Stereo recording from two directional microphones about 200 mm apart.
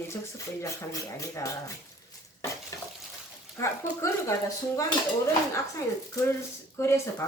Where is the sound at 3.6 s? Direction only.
15° left (ahead or behind).